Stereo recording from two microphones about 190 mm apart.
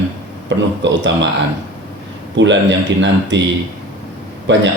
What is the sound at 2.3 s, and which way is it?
Speech, 70° right (ahead or behind).